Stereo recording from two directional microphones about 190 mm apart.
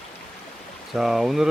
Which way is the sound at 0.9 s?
Centre (ahead or behind).